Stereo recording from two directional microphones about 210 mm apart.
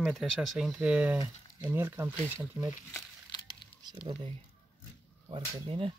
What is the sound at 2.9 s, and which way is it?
Crumpling, 20° left (ahead or behind).